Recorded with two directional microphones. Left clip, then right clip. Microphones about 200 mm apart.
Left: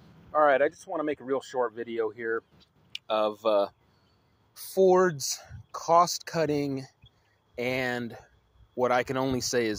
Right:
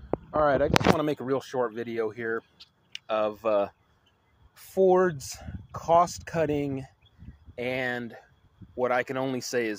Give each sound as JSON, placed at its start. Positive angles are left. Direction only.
{"t": 0.3, "sound": "speech", "side_deg": 0}
{"t": 0.9, "sound": "speech", "side_deg": -10}
{"t": 1.2, "sound": "speech", "side_deg": 5}
{"t": 1.8, "sound": "speech", "side_deg": 15}
{"t": 2.9, "sound": "speech", "side_deg": 25}
{"t": 4.8, "sound": "speech", "side_deg": 5}
{"t": 7.5, "sound": "speech", "side_deg": 20}